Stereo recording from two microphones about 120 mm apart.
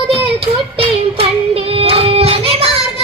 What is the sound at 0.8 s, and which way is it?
Child singing, 55° right (ahead or behind).